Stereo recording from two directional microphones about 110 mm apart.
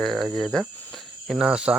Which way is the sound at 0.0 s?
Centre (ahead or behind).